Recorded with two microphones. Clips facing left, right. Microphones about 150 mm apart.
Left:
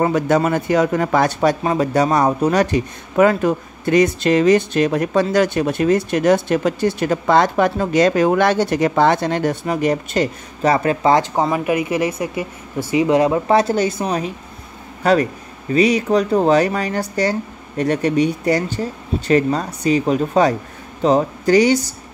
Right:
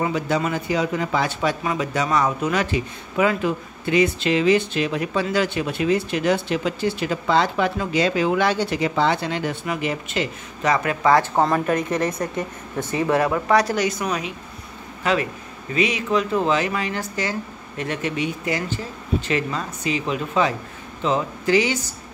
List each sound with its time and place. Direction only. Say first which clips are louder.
0.0 s speech: left 6 dB; 45° left (ahead or behind); by 11.2 s 25° left (ahead or behind)
11.3 s speech: left 2 dB; 10° left (ahead or behind); by 14.3 s 35° left (ahead or behind)
15.7 s speech: left 6 dB; 35° left (ahead or behind)